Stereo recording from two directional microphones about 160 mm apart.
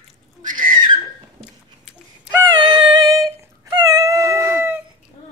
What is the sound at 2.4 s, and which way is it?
Dog, 30° right (ahead or behind).